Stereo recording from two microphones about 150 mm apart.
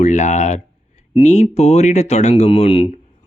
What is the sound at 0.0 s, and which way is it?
Speech, 50° left (ahead or behind).